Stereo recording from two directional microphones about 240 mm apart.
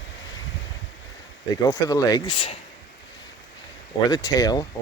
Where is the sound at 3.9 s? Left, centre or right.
Centre.